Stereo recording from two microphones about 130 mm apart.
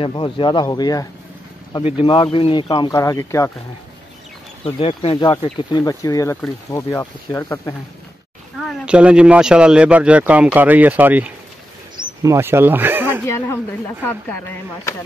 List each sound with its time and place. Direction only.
0.0 s speech: 40° left (ahead or behind)
1.8 s speech: 45° left (ahead or behind)
2.9 s speech: 20° left (ahead or behind)
4.7 s speech: 45° left (ahead or behind)
5.1 s speech: 30° left (ahead or behind)
8.8 s speech: 10° right (ahead or behind)
12.0 s speech: 25° right (ahead or behind)
13.3 s a woman's voice: 15° left (ahead or behind)